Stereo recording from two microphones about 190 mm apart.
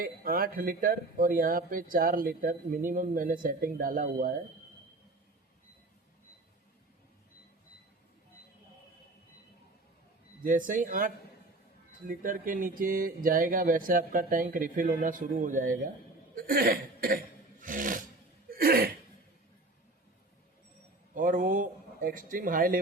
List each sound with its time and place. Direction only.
0.0 s speech: 50° right (ahead or behind)
10.4 s speech: 45° right (ahead or behind)
16.3 s cough: 50° right (ahead or behind)
17.6 s filing: 45° right (ahead or behind)
18.5 s a sound: 50° right (ahead or behind)
21.2 s speech: 45° right (ahead or behind)